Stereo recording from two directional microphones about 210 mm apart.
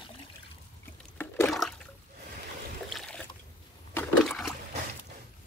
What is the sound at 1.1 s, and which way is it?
Water, centre (ahead or behind).